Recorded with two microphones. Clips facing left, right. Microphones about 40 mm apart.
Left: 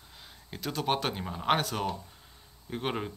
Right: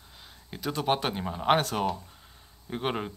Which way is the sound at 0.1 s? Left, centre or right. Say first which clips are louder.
Right 1 dB; centre.